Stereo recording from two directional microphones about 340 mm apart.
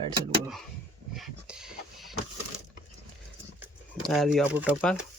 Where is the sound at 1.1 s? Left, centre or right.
Centre.